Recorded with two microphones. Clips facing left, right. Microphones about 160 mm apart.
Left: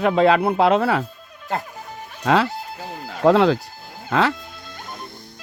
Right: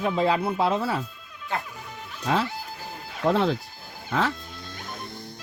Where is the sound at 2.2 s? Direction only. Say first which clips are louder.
Left 7 dB; 75° left (ahead or behind).